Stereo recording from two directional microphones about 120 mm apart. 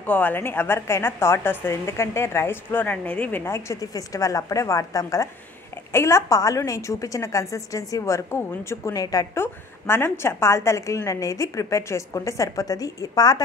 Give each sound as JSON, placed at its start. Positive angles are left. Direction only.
{"t": 0.0, "sound": "a woman's voice", "side_deg": 15}